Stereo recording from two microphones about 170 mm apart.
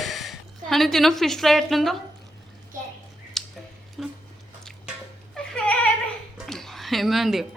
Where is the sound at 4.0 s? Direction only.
Centre (ahead or behind).